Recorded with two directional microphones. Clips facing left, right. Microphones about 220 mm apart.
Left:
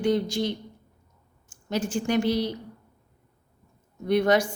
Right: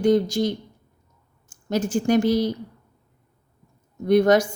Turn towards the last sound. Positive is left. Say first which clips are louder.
# right 5 dB
turn(degrees=-45)  # may be behind; listen again after turning